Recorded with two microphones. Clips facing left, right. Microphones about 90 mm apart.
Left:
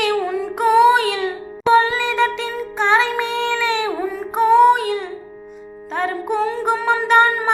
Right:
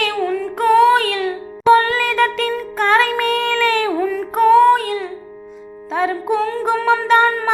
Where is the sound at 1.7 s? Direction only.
15° left (ahead or behind).